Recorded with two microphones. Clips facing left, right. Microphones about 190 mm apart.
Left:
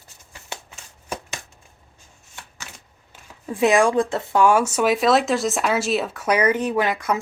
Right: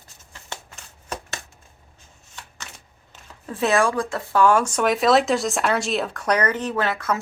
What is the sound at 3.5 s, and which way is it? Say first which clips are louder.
Speech: left 3 dB; 15° left (ahead or behind).